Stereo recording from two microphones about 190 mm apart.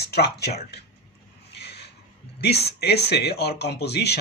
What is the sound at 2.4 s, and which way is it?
Speech, 60° left (ahead or behind).